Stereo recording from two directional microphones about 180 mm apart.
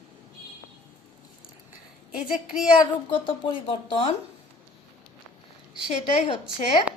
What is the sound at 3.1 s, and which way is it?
A woman's voice, 30° left (ahead or behind).